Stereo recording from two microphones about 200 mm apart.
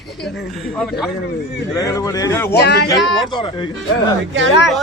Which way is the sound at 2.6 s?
55° left (ahead or behind).